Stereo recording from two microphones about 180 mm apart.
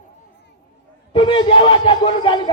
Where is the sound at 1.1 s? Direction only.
25° left (ahead or behind).